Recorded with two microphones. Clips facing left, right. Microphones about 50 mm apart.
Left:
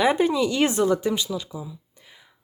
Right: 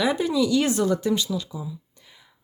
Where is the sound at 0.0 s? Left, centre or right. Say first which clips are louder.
Left 2 dB; left.